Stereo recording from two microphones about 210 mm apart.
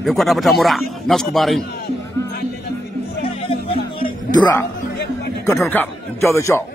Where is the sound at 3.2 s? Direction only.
25° left (ahead or behind).